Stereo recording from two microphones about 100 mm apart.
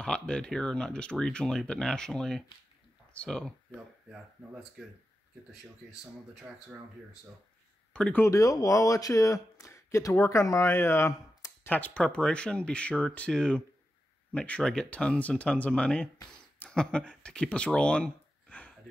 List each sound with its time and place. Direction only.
0.0 s speech: 10° left (ahead or behind)
3.7 s speech: 10° right (ahead or behind)
7.9 s speech: 10° left (ahead or behind)
8.2 s speech: 35° left (ahead or behind)
11.7 s speech: 15° left (ahead or behind)